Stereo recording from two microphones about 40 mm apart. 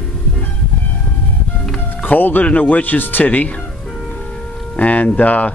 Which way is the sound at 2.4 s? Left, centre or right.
Left.